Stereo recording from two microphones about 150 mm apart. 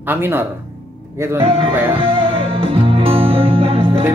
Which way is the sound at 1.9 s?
35° right (ahead or behind).